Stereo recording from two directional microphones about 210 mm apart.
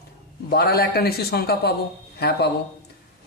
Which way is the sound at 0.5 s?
45° left (ahead or behind).